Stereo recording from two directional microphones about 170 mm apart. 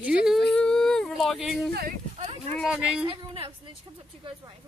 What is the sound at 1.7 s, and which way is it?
Speech, 65° right (ahead or behind).